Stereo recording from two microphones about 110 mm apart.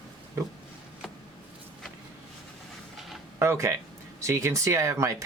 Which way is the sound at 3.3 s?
25° right (ahead or behind).